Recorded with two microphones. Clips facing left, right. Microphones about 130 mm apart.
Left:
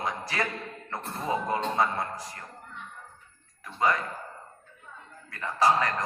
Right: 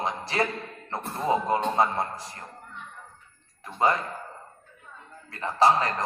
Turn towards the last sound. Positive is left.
turn(degrees=-30)  # may be behind; listen again after turning